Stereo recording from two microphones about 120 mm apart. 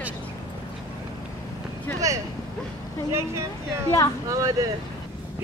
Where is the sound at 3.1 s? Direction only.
25° right (ahead or behind).